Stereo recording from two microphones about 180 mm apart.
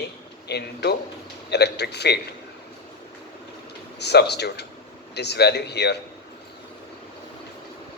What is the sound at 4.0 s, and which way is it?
A man's voice, 65° left (ahead or behind).